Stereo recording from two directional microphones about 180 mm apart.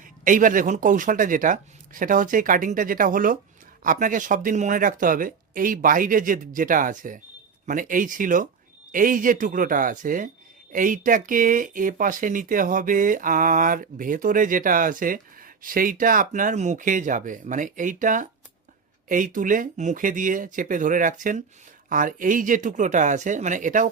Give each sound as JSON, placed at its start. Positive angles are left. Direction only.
{"t": 0.0, "sound": "speech", "side_deg": -45}